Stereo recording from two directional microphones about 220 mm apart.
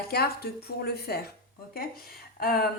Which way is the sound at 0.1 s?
45° left (ahead or behind).